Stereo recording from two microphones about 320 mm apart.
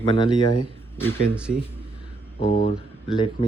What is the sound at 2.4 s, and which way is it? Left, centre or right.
Speech, left.